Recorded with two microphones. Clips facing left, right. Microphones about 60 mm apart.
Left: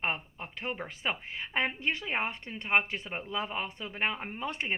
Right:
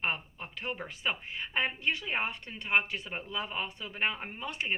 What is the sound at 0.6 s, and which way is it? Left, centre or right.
A woman's voice, left.